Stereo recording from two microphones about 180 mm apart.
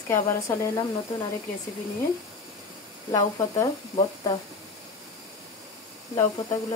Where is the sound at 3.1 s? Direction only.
20° left (ahead or behind).